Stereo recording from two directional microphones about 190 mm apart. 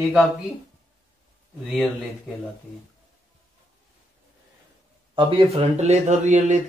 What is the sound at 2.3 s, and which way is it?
Speech, 5° right (ahead or behind).